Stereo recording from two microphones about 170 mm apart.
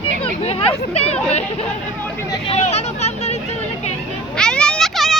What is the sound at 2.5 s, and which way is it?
Vehicle, 40° left (ahead or behind).